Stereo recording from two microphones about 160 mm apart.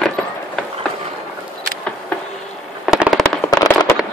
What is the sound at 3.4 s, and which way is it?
Fireworks, 25° left (ahead or behind).